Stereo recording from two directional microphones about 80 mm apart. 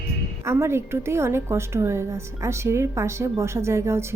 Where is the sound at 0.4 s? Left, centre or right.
Right.